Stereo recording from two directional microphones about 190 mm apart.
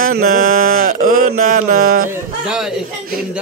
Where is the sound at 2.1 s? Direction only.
5° right (ahead or behind).